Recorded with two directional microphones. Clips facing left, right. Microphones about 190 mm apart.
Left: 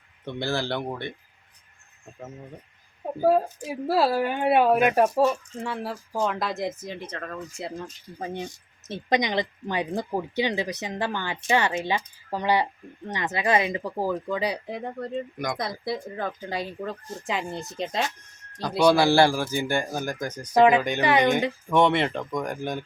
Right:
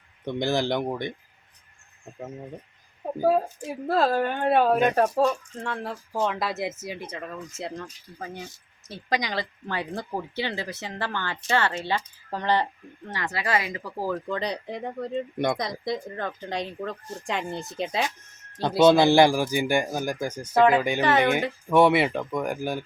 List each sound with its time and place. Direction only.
0.3 s speech: 15° right (ahead or behind)
3.2 s speech: centre (ahead or behind)
8.2 s speech: 25° left (ahead or behind); by 18.0 s 5° right (ahead or behind)
18.8 s speech: 20° right (ahead or behind)
20.5 s speech: 15° left (ahead or behind)
20.7 s speech: 10° right (ahead or behind)
21.0 s speech: 15° left (ahead or behind)
21.7 s speech: 5° right (ahead or behind)